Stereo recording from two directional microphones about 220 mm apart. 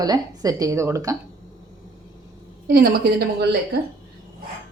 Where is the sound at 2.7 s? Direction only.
45° right (ahead or behind).